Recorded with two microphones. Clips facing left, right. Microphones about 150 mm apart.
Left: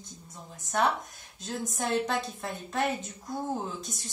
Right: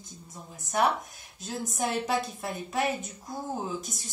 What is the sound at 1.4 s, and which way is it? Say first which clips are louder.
A woman's voice: right 1 dB; 5° right (ahead or behind).